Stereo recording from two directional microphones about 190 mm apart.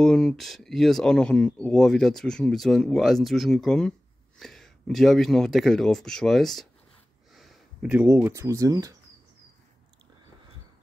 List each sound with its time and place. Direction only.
0.0 s speech: 5° left (ahead or behind); by 8.9 s 20° right (ahead or behind)